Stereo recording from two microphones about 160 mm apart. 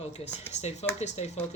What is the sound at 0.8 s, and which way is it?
Speech, 40° left (ahead or behind).